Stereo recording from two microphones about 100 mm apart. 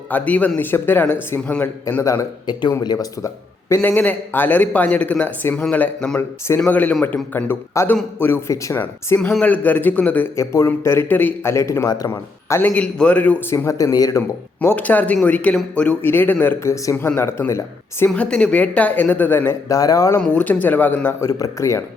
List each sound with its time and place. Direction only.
0.1 s speech: 15° left (ahead or behind)
2.5 s speech: 45° left (ahead or behind)
3.8 s speech: 15° left (ahead or behind)
7.8 s a man's voice: 30° left (ahead or behind)
10.3 s a man's voice: 30° left (ahead or behind)
11.5 s a man's voice: 30° left (ahead or behind)
12.7 s speech: 10° left (ahead or behind)
13.5 s speech: 30° left (ahead or behind)
14.2 s a man's voice: 25° left (ahead or behind)
18.0 s speech: 10° left (ahead or behind)
19.6 s speech: 35° left (ahead or behind)
20.2 s speech: 15° left (ahead or behind)
21.2 s speech: 35° left (ahead or behind)